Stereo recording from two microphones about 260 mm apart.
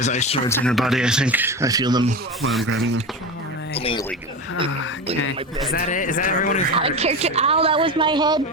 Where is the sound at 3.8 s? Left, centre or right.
Left.